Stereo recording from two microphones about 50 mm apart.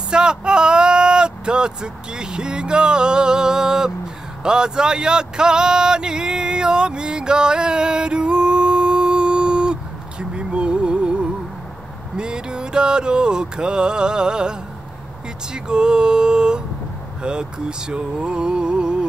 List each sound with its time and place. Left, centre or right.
0.1 s speech: centre
4.4 s a sound: centre
12.2 s music: centre
15.5 s female singing: centre
17.2 s speech: centre